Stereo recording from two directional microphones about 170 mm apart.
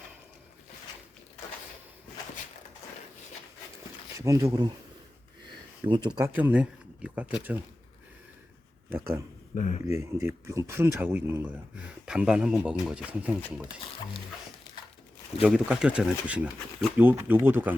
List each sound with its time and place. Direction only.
4.2 s speech: 20° right (ahead or behind)
5.9 s speech: 25° right (ahead or behind)
6.2 s speech: 10° right (ahead or behind)
8.9 s speech: 15° right (ahead or behind)
9.6 s speech: 45° left (ahead or behind)
9.8 s speech: 15° right (ahead or behind)
15.4 s speech: 5° right (ahead or behind)